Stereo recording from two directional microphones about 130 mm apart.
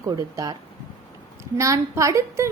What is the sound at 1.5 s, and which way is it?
Speech, 25° right (ahead or behind).